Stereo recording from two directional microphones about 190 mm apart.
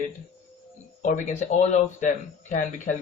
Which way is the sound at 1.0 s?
40° left (ahead or behind).